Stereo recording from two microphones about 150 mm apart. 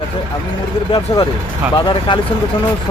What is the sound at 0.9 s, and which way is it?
Speech, 30° left (ahead or behind).